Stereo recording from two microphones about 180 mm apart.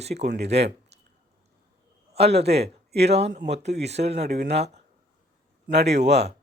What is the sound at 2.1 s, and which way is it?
Speech, 35° right (ahead or behind).